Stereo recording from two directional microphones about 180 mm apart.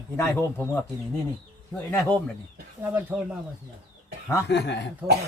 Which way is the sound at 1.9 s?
10° left (ahead or behind).